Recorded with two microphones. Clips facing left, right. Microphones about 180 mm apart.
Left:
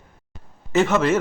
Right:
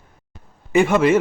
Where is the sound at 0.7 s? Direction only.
10° right (ahead or behind).